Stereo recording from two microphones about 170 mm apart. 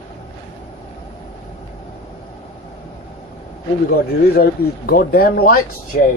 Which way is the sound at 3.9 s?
60° left (ahead or behind).